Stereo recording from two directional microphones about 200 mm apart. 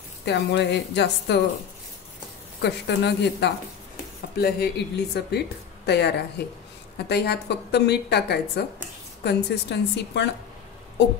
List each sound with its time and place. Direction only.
0.2 s a woman's voice: 60° left (ahead or behind)
2.6 s a woman's voice: 55° left (ahead or behind)